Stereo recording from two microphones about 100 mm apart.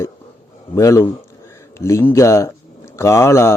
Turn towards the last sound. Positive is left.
turn(degrees=30)  # may be behind; listen again after turning